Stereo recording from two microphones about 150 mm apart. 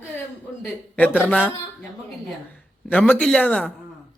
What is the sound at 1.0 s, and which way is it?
Speech, 10° left (ahead or behind).